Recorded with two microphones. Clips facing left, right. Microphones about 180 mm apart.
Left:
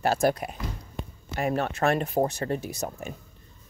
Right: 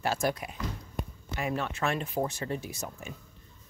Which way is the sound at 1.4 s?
45° left (ahead or behind).